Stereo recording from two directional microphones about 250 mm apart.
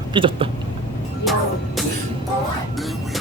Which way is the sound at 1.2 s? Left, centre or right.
Centre.